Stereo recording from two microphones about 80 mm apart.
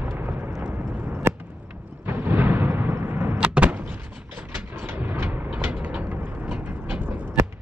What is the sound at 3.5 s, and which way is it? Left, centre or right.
Artillery fire, centre.